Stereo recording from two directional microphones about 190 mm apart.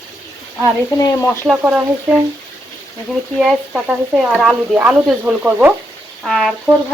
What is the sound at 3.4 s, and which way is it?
Speech, centre (ahead or behind).